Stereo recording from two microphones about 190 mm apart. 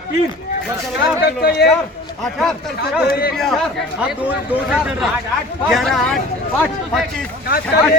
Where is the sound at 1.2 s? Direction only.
60° left (ahead or behind).